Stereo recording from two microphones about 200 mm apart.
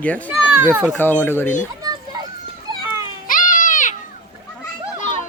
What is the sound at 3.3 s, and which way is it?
Baby cry, 40° left (ahead or behind).